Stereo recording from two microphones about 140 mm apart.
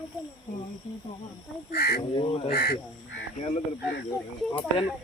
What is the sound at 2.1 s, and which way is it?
Speech, 35° left (ahead or behind).